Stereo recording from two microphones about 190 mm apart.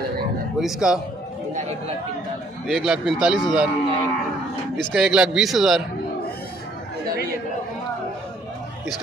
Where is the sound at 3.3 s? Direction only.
25° left (ahead or behind).